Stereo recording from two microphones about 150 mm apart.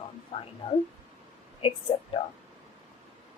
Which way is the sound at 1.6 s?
40° left (ahead or behind).